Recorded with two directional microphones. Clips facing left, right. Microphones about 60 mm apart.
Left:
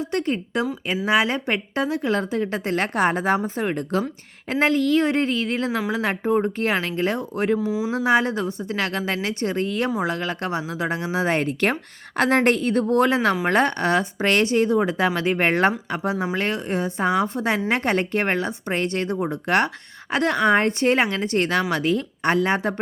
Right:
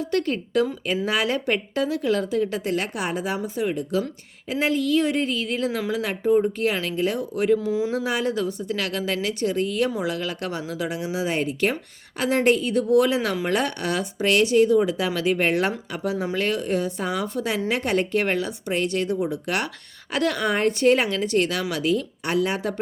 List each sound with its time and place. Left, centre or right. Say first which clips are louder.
0.0 s speech: even; left
7.6 s speech: even; centre
7.9 s speech: left 4 dB; left
15.9 s speech: left 2 dB; left